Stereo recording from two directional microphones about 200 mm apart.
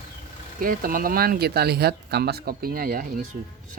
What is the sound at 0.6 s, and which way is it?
Speech, 45° right (ahead or behind).